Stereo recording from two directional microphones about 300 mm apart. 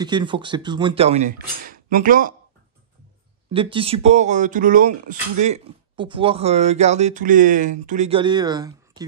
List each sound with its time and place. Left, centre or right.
0.0 s speech: centre
3.5 s speech: centre